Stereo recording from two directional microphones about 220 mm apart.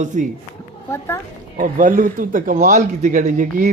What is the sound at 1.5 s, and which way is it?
Speech, 35° right (ahead or behind).